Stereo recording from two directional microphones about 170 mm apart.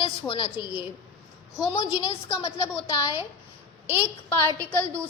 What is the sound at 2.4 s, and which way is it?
Speech, 15° left (ahead or behind).